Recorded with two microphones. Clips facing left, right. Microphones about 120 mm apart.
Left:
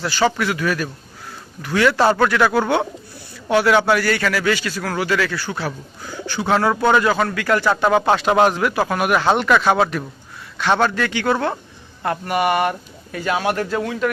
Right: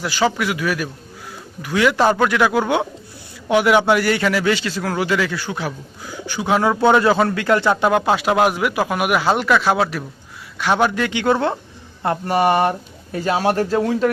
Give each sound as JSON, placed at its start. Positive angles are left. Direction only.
{"t": 0.0, "sound": "a man's voice", "side_deg": -10}
{"t": 7.9, "sound": "a man's voice", "side_deg": -5}